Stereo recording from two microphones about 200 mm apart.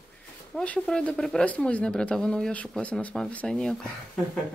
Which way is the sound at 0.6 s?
5° left (ahead or behind).